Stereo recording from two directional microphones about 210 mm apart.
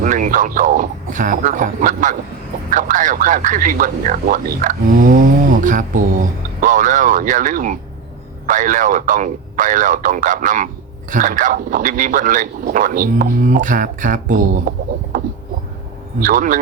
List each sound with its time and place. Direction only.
0.0 s speech: 40° right (ahead or behind)
16.2 s speech: 40° right (ahead or behind)